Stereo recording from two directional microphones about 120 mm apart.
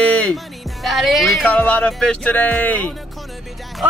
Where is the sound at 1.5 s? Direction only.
10° left (ahead or behind).